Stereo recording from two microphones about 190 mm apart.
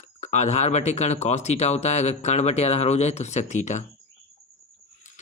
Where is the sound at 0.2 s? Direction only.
35° left (ahead or behind).